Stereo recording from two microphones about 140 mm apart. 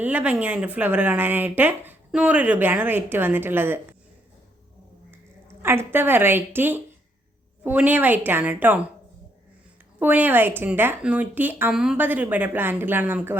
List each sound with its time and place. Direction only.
0.0 s speech: 10° right (ahead or behind)
5.5 s speech: 15° right (ahead or behind)
10.0 s speech: 10° right (ahead or behind)